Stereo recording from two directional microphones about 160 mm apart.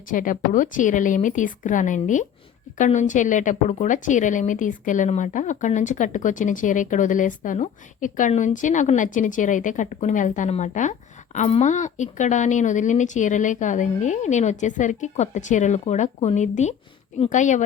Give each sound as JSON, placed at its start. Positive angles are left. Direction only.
{"t": 0.1, "sound": "a woman's voice", "side_deg": 60}